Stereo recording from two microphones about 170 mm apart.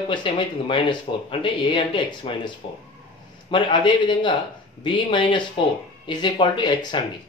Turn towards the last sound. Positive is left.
turn(degrees=25)  # may be behind; listen again after turning